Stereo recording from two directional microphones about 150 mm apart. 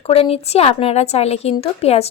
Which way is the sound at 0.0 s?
40° left (ahead or behind).